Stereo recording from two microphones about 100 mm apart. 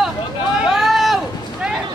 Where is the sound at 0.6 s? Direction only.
5° right (ahead or behind).